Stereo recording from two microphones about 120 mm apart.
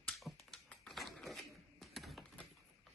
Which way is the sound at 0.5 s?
Centre (ahead or behind).